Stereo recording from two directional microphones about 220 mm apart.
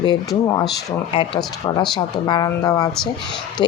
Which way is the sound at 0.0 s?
15° left (ahead or behind).